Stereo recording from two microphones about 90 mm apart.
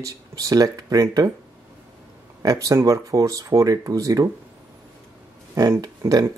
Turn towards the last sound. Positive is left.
turn(degrees=-45)  # may be behind; listen again after turning